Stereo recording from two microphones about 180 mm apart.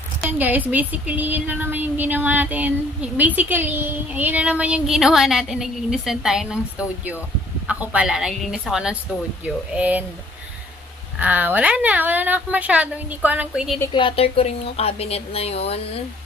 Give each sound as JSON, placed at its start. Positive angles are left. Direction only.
{"t": 0.3, "sound": "speech", "side_deg": -10}
{"t": 7.6, "sound": "a woman's voice", "side_deg": -5}
{"t": 11.1, "sound": "speech", "side_deg": -10}
{"t": 13.9, "sound": "speech", "side_deg": 30}